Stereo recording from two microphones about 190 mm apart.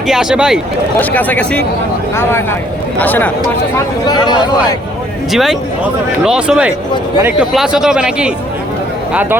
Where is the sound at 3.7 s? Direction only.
20° left (ahead or behind).